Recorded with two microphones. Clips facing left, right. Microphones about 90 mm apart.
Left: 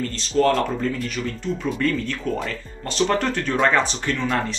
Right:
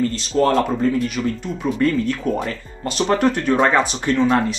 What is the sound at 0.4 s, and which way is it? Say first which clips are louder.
Speech: right 2 dB; 15° right (ahead or behind).